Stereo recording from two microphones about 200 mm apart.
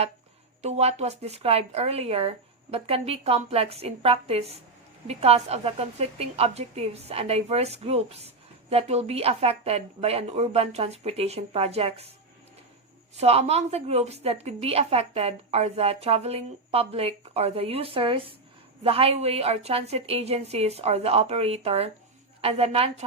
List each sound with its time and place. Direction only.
0.6 s a woman's voice: 30° right (ahead or behind)
13.1 s a woman's voice: 30° right (ahead or behind)